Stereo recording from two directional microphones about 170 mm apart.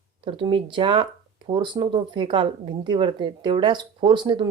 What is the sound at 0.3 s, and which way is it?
A woman's voice, 30° right (ahead or behind).